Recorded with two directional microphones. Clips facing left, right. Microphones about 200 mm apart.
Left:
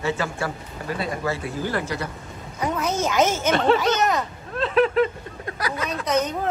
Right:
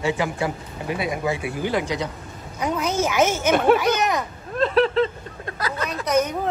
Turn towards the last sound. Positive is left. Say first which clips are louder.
# right 2 dB
turn(degrees=-10)  # may be behind; listen again after turning